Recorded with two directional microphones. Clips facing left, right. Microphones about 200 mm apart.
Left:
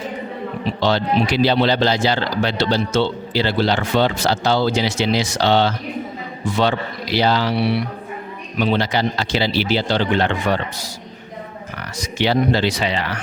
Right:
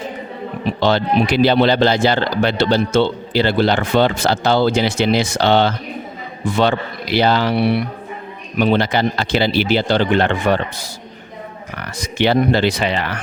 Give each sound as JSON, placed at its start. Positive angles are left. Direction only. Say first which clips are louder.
{"t": 0.6, "sound": "speech", "louder": "right 3 dB", "side_deg": -55}
{"t": 11.9, "sound": "speech", "louder": "right 3 dB", "side_deg": -55}